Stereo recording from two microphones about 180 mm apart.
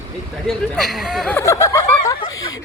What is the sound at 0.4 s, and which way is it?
Speech, centre (ahead or behind).